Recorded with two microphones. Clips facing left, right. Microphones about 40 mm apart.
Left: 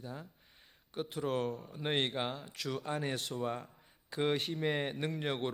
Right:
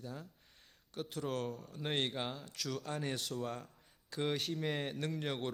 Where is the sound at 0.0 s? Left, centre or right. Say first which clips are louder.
Left 1 dB; centre.